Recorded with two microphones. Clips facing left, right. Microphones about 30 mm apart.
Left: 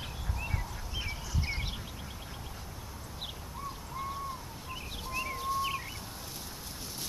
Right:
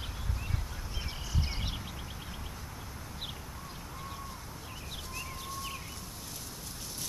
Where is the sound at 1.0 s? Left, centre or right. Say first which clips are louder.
Even; centre.